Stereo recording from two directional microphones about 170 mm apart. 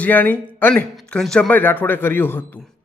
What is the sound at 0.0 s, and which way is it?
Speech, 10° left (ahead or behind).